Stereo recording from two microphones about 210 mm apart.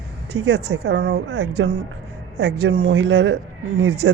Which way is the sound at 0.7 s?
55° right (ahead or behind).